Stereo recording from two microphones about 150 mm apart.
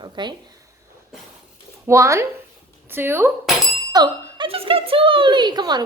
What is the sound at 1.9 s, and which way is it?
Speech, 20° right (ahead or behind).